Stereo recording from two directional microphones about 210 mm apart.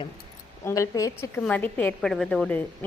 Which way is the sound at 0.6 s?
15° left (ahead or behind).